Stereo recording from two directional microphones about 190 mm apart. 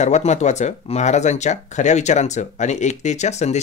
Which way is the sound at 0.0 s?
35° left (ahead or behind).